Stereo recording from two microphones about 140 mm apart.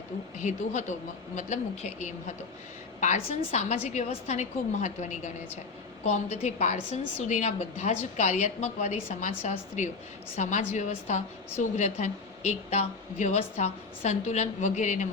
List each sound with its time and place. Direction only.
0.3 s a woman's voice: 55° left (ahead or behind)